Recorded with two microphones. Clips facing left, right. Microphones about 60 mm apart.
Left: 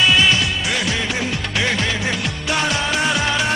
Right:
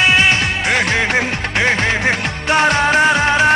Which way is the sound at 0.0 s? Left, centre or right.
Right.